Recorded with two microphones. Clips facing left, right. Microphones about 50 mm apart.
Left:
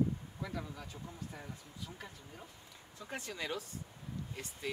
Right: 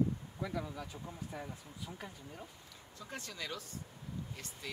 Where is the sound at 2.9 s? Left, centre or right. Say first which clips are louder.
Left 2 dB; left.